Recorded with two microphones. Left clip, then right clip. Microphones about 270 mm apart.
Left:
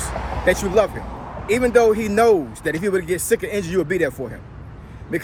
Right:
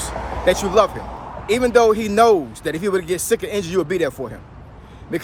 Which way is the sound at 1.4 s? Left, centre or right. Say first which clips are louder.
Right 1 dB; centre.